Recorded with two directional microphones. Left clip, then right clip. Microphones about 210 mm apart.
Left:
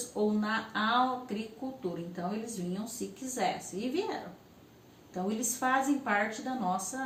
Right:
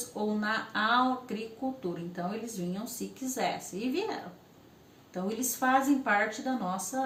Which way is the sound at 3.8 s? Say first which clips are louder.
Right 1 dB; 35° right (ahead or behind).